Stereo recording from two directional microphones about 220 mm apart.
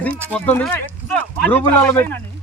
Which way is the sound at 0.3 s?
5° left (ahead or behind).